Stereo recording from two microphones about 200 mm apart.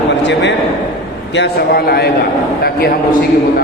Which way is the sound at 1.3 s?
50° left (ahead or behind).